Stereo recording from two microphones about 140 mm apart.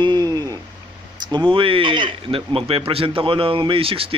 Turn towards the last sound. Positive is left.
turn(degrees=-40)  # may be behind; listen again after turning